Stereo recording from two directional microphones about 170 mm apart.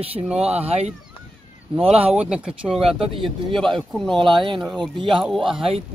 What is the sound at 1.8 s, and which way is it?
Speech, 35° right (ahead or behind).